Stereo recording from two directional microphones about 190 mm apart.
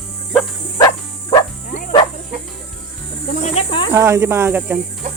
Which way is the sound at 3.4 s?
30° left (ahead or behind).